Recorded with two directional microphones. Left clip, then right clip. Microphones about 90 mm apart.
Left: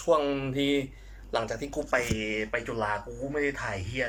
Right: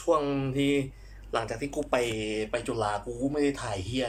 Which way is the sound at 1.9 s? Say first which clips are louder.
Even; 25° right (ahead or behind).